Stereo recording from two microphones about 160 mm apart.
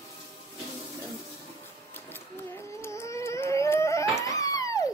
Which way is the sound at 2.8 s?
15° left (ahead or behind).